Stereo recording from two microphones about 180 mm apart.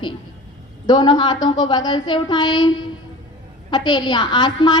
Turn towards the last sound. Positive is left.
turn(degrees=25)  # may be behind; listen again after turning